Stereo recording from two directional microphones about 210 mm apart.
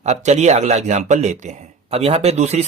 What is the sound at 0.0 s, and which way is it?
Speech, 35° right (ahead or behind).